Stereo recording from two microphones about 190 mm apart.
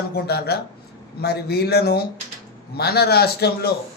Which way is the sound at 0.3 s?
55° left (ahead or behind).